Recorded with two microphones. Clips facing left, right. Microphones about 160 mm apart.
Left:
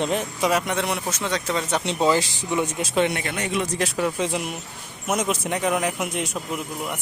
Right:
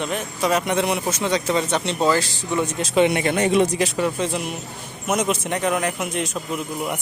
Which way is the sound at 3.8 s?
Centre (ahead or behind).